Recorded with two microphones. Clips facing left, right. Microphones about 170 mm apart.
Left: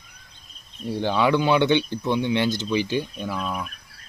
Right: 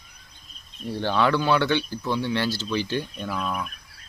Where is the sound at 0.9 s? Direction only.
15° left (ahead or behind).